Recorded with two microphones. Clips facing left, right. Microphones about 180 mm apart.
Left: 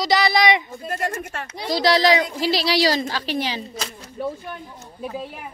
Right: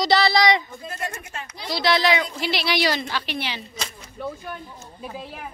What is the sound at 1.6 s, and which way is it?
A woman's voice, 40° left (ahead or behind).